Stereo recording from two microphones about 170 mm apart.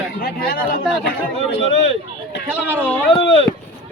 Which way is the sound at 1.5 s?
35° left (ahead or behind).